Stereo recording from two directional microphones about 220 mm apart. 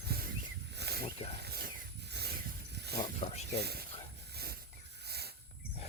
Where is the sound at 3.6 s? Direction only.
45° right (ahead or behind).